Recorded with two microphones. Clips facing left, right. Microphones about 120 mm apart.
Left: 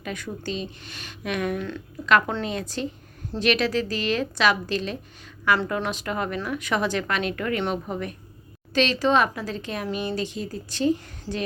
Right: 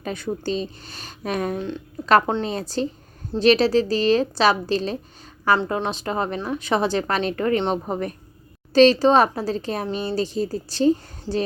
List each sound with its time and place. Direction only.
0.0 s speech: 35° right (ahead or behind)